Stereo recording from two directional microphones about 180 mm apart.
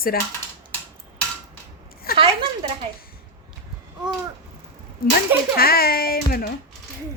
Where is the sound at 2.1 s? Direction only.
30° right (ahead or behind).